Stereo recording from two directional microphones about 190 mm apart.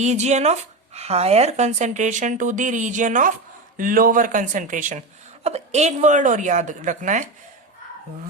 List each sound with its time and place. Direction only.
0.0 s speech: 35° right (ahead or behind)